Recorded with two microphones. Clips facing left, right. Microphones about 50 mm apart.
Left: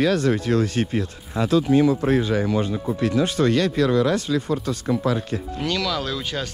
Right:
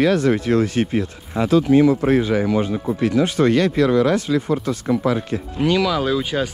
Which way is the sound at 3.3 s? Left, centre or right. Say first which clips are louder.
Right 3 dB; right.